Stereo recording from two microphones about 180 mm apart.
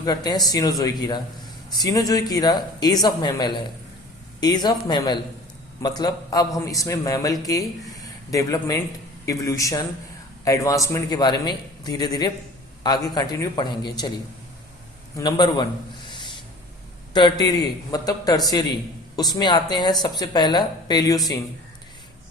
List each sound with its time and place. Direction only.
0.0 s a woman's voice: 20° left (ahead or behind)
15.1 s a woman's voice: 25° left (ahead or behind)
16.0 s a sound: 25° left (ahead or behind)
17.2 s a woman's voice: 25° left (ahead or behind)